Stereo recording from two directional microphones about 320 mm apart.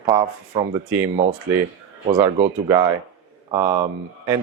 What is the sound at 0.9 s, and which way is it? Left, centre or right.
Speech, centre.